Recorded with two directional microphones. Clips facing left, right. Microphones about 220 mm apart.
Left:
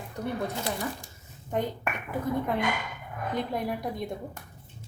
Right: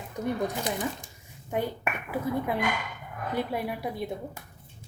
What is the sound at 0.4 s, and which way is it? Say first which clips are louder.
Speech: right 2 dB; 15° right (ahead or behind).